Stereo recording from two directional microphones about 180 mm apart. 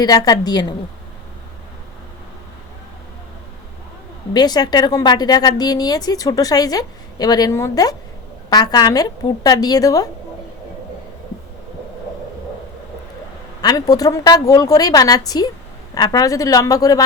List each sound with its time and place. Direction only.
0.0 s speech: 20° left (ahead or behind)
4.4 s speech: 20° left (ahead or behind)
13.6 s speech: 20° left (ahead or behind)